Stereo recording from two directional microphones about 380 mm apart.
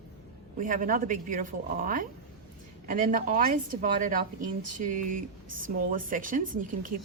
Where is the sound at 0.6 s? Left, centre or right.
Right.